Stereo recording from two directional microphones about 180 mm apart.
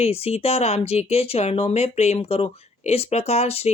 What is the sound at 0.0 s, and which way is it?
Speech, 35° left (ahead or behind).